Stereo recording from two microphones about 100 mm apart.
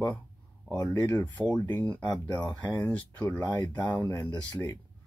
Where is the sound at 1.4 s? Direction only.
15° left (ahead or behind).